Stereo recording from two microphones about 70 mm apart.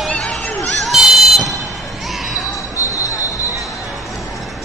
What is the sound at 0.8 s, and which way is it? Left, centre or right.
Run, centre.